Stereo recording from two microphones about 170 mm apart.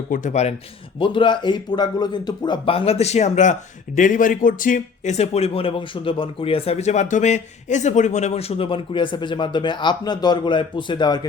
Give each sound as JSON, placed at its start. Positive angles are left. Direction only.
{"t": 0.1, "sound": "speech", "side_deg": 45}
{"t": 0.9, "sound": "a man's voice", "side_deg": 30}